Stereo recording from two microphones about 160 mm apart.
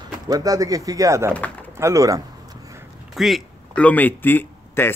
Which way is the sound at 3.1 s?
Centre (ahead or behind).